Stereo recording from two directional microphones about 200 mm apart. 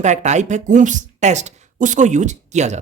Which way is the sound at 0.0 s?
35° right (ahead or behind).